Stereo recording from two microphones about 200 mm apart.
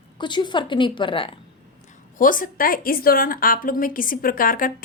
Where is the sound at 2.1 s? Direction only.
40° left (ahead or behind).